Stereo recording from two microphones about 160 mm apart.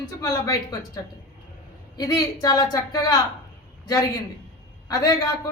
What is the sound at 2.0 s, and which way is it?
A woman's voice, 20° left (ahead or behind).